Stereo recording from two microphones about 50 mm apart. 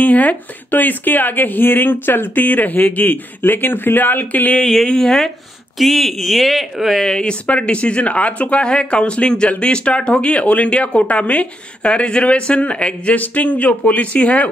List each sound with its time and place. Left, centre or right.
0.0 s speech: left
4.7 s speech: centre
5.8 s speech: centre
7.1 s speech: centre